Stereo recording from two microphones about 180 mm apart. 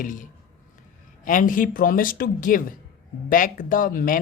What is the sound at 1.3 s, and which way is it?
Speech, 50° left (ahead or behind).